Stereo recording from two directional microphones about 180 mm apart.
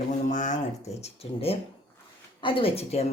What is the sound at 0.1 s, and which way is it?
A woman's voice, 45° left (ahead or behind).